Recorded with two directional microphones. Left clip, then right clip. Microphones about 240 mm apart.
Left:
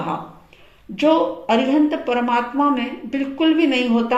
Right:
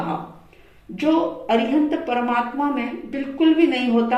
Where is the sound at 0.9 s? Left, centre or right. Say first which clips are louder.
Left 4 dB; left.